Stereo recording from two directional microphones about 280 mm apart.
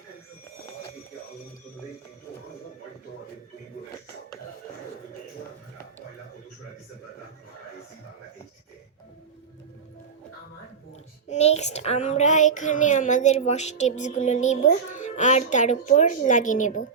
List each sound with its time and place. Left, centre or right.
11.3 s child singing: left